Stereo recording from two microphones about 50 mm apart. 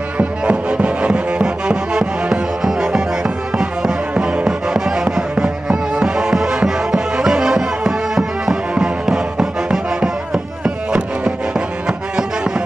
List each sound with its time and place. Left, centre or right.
0.2 s music: right
4.1 s music: right